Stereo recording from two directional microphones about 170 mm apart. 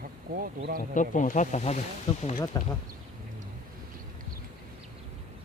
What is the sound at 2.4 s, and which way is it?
Speech, 20° left (ahead or behind).